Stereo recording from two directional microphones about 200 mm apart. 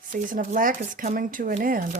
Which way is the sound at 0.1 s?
40° right (ahead or behind).